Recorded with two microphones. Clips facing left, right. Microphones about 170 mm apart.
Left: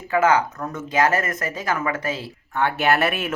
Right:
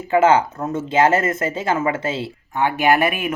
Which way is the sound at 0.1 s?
25° right (ahead or behind).